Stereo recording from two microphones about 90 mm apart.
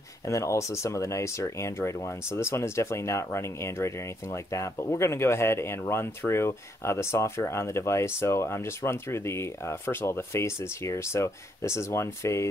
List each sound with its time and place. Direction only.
0.3 s speech: 35° left (ahead or behind)